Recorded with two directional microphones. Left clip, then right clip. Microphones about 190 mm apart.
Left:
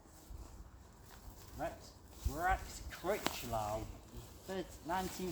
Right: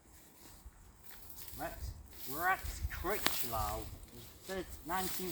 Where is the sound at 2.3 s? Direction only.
25° left (ahead or behind).